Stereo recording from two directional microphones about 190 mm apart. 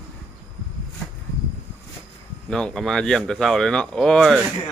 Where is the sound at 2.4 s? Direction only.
5° left (ahead or behind).